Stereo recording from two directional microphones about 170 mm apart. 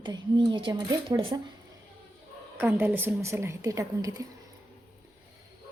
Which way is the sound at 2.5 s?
10° right (ahead or behind).